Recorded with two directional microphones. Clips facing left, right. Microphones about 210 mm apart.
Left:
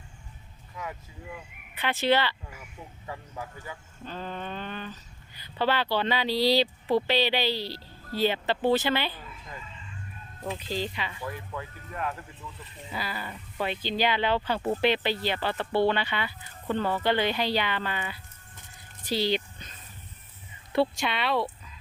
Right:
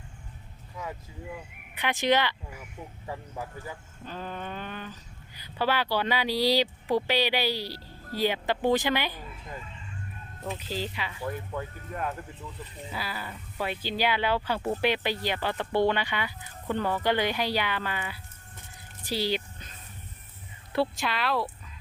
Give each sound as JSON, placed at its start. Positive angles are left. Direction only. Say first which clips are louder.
{"t": 1.7, "sound": "speech", "louder": "even", "side_deg": -15}
{"t": 4.0, "sound": "speech", "louder": "left 1 dB", "side_deg": -10}
{"t": 10.7, "sound": "speech", "louder": "left 2 dB", "side_deg": -10}
{"t": 11.3, "sound": "speech", "louder": "right 3 dB", "side_deg": -35}
{"t": 12.9, "sound": "speech", "louder": "left 2 dB", "side_deg": -5}
{"t": 19.0, "sound": "a sound", "louder": "left 2 dB", "side_deg": -10}
{"t": 20.7, "sound": "speech", "louder": "left 2 dB", "side_deg": 0}